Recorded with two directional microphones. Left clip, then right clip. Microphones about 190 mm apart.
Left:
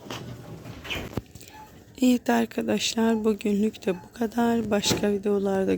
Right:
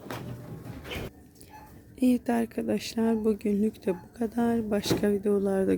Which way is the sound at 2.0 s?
Centre (ahead or behind).